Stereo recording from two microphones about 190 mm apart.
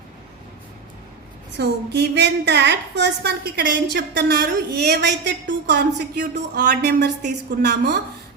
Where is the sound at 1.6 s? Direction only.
60° right (ahead or behind).